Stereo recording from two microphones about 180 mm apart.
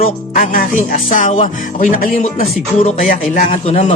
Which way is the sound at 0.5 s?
50° left (ahead or behind).